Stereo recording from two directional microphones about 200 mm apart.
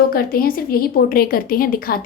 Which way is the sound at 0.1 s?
50° left (ahead or behind).